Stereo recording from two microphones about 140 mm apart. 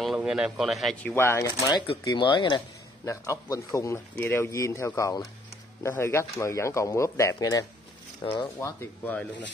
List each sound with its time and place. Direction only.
0.0 s a man's voice: 5° right (ahead or behind)
1.0 s a man's voice: 15° left (ahead or behind); by 2.6 s 35° left (ahead or behind)
3.1 s a man's voice: 20° left (ahead or behind)
8.5 s speech: 15° left (ahead or behind)